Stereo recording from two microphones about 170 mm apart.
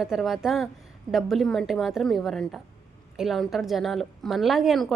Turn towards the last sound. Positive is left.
turn(degrees=0)  # may be behind; listen again after turning